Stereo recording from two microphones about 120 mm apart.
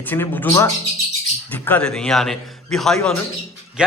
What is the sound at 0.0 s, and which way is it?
A man's voice, 15° left (ahead or behind).